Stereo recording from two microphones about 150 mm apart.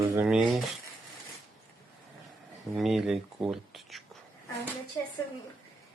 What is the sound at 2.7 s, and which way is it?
A man's voice, centre (ahead or behind).